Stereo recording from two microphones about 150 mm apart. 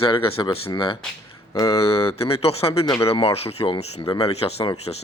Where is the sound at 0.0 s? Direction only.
35° left (ahead or behind).